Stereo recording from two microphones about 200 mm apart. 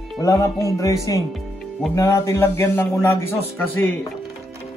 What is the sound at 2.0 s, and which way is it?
Speech, 15° left (ahead or behind).